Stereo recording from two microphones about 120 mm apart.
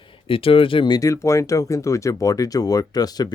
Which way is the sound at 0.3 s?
50° left (ahead or behind).